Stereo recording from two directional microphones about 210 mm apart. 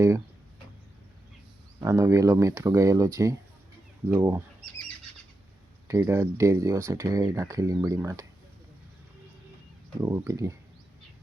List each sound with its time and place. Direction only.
1.8 s speech: 15° right (ahead or behind)
5.9 s speech: 10° right (ahead or behind)
10.0 s speech: 15° right (ahead or behind)